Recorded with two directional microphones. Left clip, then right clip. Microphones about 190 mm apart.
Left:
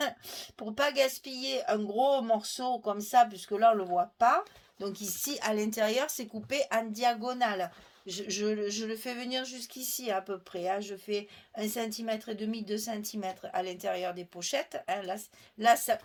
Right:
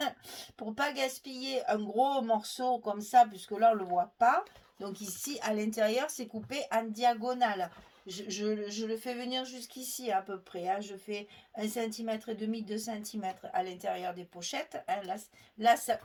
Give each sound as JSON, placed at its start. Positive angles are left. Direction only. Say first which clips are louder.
{"t": 0.0, "sound": "a woman's voice", "louder": "left 2 dB", "side_deg": 40}
{"t": 4.8, "sound": "speech", "louder": "left 4 dB", "side_deg": 45}